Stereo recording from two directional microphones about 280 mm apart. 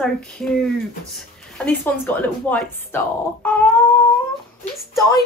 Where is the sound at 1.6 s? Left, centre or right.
Centre.